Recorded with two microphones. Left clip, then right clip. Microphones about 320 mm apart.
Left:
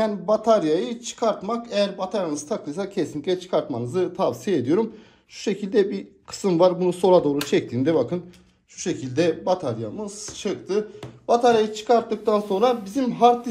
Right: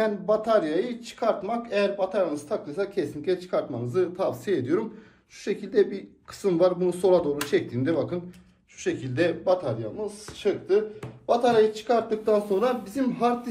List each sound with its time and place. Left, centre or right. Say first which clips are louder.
0.0 s speech: left 3 dB; centre